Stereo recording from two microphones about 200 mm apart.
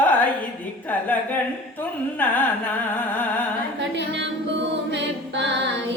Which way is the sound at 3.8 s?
65° right (ahead or behind).